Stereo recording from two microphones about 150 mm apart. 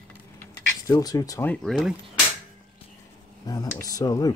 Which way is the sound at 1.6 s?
Centre (ahead or behind).